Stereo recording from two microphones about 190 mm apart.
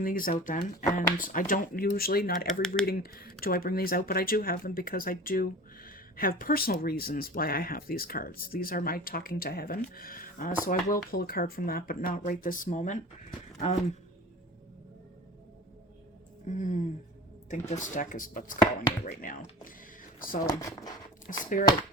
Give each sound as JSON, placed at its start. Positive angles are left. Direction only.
{"t": 0.0, "sound": "speech", "side_deg": 45}
{"t": 2.5, "sound": "speech", "side_deg": 5}
{"t": 2.8, "sound": "speech", "side_deg": 50}
{"t": 16.5, "sound": "a sound", "side_deg": 40}
{"t": 17.5, "sound": "speech", "side_deg": 40}
{"t": 20.5, "sound": "speech", "side_deg": 20}
{"t": 21.3, "sound": "speech", "side_deg": 45}